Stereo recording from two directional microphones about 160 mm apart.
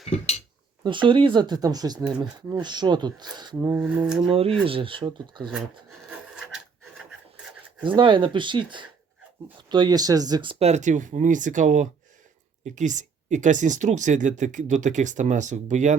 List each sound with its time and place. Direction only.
0.9 s speech: 30° right (ahead or behind)
2.0 s speech: 5° right (ahead or behind)
2.5 s speech: 25° right (ahead or behind)
3.7 s a sound: 10° right (ahead or behind)
4.3 s speech: 35° right (ahead or behind)
6.1 s wood: 5° right (ahead or behind)
7.9 s speech: 30° right (ahead or behind); by 16.0 s 50° right (ahead or behind)